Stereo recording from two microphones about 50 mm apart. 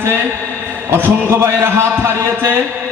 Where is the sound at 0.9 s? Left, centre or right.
Right.